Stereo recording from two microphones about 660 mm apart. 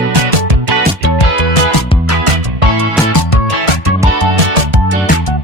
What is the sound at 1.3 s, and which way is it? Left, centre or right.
Music, left.